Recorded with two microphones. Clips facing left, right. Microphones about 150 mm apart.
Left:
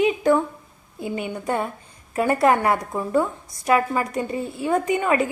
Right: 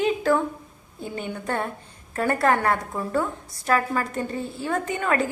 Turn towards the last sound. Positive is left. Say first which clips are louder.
# left 4 dB
turn(degrees=10)  # may be behind; listen again after turning